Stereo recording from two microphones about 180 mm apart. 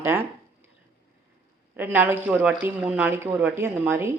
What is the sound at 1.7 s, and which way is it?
Speech, 10° right (ahead or behind).